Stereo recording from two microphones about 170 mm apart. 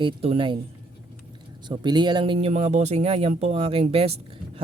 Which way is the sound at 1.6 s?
25° right (ahead or behind).